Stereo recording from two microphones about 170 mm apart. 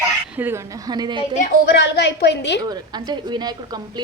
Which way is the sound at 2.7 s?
25° right (ahead or behind).